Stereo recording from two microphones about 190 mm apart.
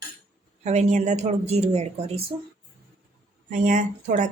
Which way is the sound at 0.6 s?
35° right (ahead or behind).